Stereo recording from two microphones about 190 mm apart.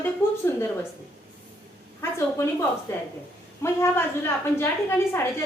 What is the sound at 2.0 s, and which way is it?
A woman's voice, 15° left (ahead or behind).